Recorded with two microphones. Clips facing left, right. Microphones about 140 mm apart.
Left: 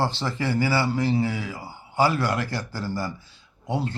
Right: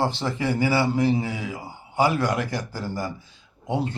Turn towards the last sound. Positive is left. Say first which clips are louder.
# right 1 dB
turn(degrees=-20)  # may be behind; listen again after turning